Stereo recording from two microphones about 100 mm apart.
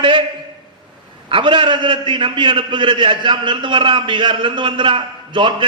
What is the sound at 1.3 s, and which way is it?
A man's voice, 55° right (ahead or behind).